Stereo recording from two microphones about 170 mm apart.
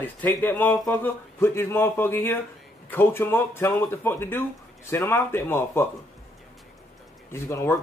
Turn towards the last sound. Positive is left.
turn(degrees=15)  # may be behind; listen again after turning